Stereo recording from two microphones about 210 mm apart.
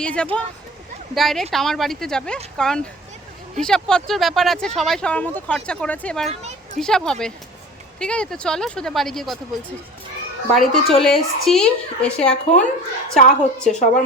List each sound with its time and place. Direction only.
0.0 s speech: 5° left (ahead or behind)
10.5 s speech: centre (ahead or behind)
13.1 s a woman's voice: 35° left (ahead or behind)